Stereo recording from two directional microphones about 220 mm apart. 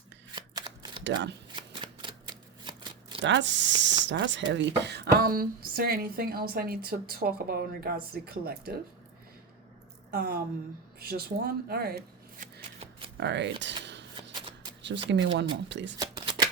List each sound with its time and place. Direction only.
0.3 s shuffling cards: 20° right (ahead or behind)
1.0 s speech: 55° right (ahead or behind)
1.5 s shuffling cards: 20° right (ahead or behind)
3.2 s speech: 55° right (ahead or behind)
10.1 s a woman's voice: 45° right (ahead or behind)
13.1 s a sound: 55° right (ahead or behind)
14.3 s shuffling cards: 20° right (ahead or behind)
14.8 s speech: 55° right (ahead or behind)
16.0 s shuffling cards: 15° right (ahead or behind)